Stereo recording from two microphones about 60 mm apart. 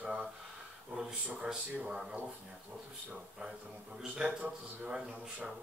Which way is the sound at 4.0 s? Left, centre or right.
Centre.